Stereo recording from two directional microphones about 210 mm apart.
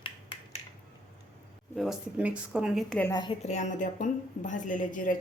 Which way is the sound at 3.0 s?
20° left (ahead or behind).